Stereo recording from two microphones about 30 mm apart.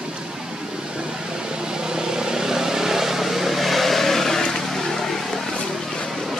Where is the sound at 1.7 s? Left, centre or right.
Right; by 5.4 s centre.